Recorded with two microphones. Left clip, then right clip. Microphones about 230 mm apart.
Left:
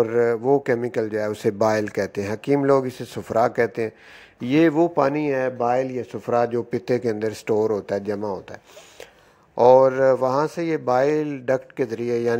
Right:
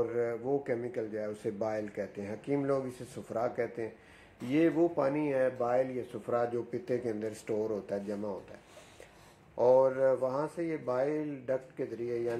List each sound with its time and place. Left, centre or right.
0.0 s speech: left
9.6 s speech: left